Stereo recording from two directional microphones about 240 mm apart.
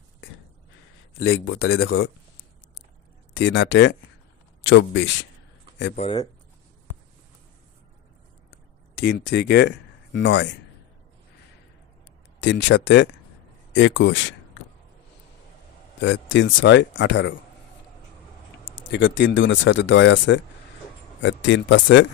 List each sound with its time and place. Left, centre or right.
1.2 s speech: left
3.3 s speech: left
5.9 s speech: left
8.5 s a sound: left
12.4 s speech: left
16.0 s speech: left
18.7 s speech: left